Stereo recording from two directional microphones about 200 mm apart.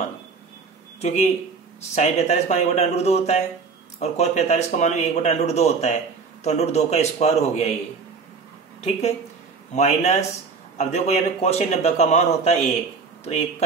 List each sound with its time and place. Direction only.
1.0 s speech: 35° left (ahead or behind)
9.8 s speech: 35° left (ahead or behind)